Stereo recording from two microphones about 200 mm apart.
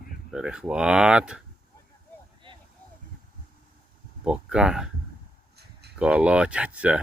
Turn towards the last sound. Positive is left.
turn(degrees=-5)  # may be behind; listen again after turning